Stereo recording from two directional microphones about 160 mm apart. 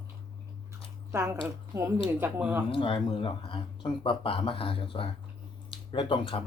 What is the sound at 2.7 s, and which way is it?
Speech, 30° left (ahead or behind).